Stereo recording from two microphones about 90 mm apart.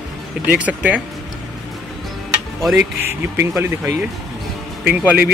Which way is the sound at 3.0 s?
30° right (ahead or behind).